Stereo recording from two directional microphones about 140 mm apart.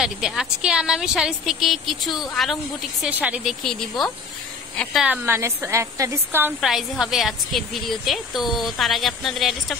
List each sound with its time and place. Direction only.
0.0 s a woman's voice: centre (ahead or behind)
3.6 s a woman's voice: centre (ahead or behind)
5.1 s a woman's voice: 15° right (ahead or behind)
6.6 s a woman's voice: centre (ahead or behind)